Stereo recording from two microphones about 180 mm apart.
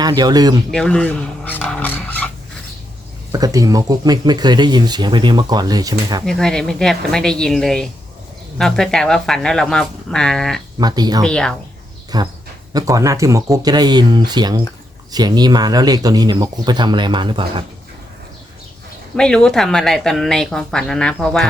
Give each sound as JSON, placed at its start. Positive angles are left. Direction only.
{"t": 0.0, "sound": "speech", "side_deg": -20}
{"t": 0.7, "sound": "speech", "side_deg": 5}
{"t": 3.3, "sound": "speech", "side_deg": -20}
{"t": 6.2, "sound": "speech", "side_deg": 5}
{"t": 10.8, "sound": "speech", "side_deg": -20}
{"t": 11.3, "sound": "speech", "side_deg": 5}
{"t": 12.1, "sound": "speech", "side_deg": -20}
{"t": 19.1, "sound": "speech", "side_deg": 5}